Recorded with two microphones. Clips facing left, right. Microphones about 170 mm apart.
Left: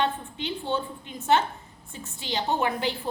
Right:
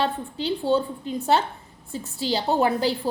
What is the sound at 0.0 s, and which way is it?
A woman's voice, 35° right (ahead or behind).